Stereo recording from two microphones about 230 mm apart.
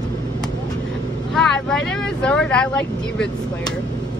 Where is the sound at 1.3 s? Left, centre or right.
Centre.